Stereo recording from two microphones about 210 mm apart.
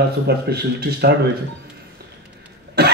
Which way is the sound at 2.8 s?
50° right (ahead or behind).